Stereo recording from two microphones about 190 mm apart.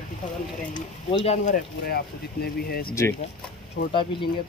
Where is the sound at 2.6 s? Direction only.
55° left (ahead or behind).